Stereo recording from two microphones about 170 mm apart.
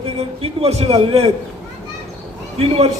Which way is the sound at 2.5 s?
35° right (ahead or behind).